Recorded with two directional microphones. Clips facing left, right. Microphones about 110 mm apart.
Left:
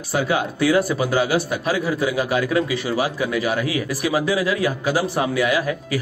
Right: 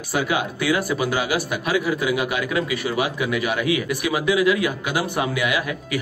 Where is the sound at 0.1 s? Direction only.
30° left (ahead or behind).